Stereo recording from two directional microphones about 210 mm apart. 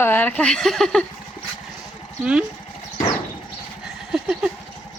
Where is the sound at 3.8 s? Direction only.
Centre (ahead or behind).